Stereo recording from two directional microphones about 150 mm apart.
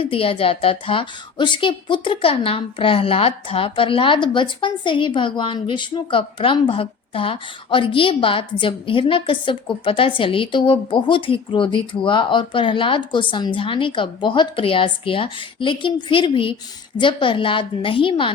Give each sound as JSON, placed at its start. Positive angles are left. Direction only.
{"t": 0.0, "sound": "a woman's voice", "side_deg": 35}